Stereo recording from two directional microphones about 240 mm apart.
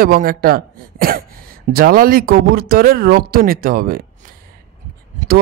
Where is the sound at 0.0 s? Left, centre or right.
Right.